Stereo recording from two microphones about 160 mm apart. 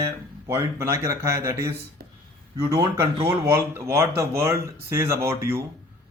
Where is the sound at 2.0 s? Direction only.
70° right (ahead or behind).